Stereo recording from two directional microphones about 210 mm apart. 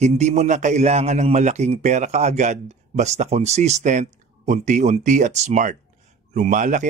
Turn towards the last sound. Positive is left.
turn(degrees=-40)  # may be behind; listen again after turning